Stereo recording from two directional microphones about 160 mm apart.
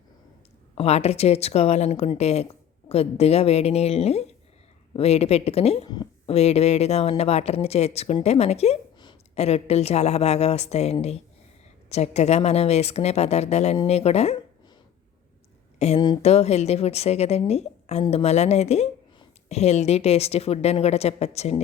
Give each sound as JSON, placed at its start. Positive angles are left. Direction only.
{"t": 0.8, "sound": "speech", "side_deg": 40}
{"t": 5.9, "sound": "a sound", "side_deg": 25}
{"t": 6.3, "sound": "speech", "side_deg": 40}
{"t": 15.8, "sound": "speech", "side_deg": 40}